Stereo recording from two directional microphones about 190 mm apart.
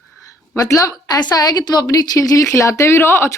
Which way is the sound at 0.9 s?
20° left (ahead or behind).